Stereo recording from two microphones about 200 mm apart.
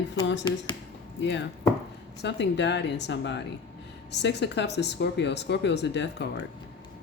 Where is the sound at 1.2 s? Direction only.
65° left (ahead or behind).